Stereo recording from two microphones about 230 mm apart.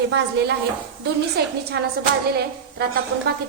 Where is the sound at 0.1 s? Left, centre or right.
Right.